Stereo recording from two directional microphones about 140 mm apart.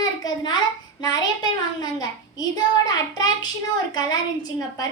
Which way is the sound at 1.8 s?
30° left (ahead or behind).